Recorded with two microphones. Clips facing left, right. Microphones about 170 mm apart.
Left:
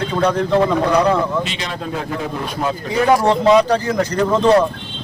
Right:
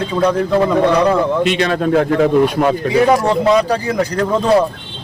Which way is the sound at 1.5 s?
60° right (ahead or behind).